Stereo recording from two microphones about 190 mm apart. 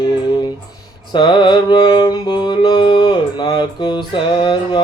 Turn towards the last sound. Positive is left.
turn(degrees=25)  # may be behind; listen again after turning